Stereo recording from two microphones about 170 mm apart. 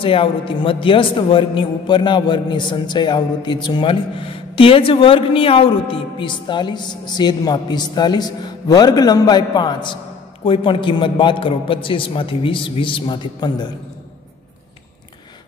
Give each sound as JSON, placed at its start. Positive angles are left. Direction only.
{"t": 0.0, "sound": "a man's voice", "side_deg": 30}